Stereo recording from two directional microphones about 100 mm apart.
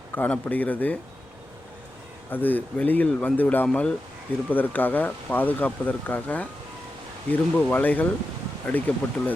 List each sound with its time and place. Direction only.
0.2 s speech: 15° left (ahead or behind)
2.3 s speech: 20° left (ahead or behind)